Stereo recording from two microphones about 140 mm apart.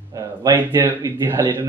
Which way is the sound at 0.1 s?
25° right (ahead or behind).